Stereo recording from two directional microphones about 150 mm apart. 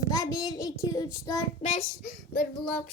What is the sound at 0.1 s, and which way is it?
Speech, 25° left (ahead or behind).